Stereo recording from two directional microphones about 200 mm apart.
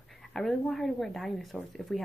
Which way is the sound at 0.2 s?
Centre (ahead or behind).